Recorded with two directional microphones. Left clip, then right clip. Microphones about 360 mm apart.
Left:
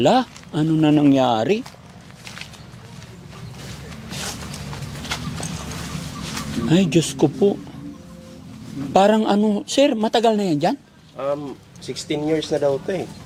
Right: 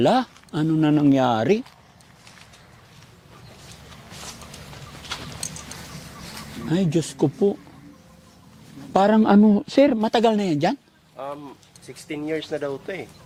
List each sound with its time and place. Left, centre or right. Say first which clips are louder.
0.0 s speech: left 3 dB; right
6.7 s speech: left 5 dB; right
9.0 s speech: left 1 dB; right
12.0 s speech: left 6 dB; centre; by 13.0 s right